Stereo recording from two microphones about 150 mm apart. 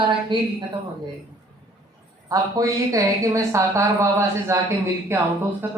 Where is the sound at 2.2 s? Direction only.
25° right (ahead or behind).